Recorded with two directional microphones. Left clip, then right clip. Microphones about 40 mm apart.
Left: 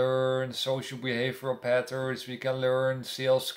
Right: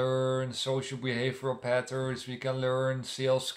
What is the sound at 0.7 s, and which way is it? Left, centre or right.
Speech, right.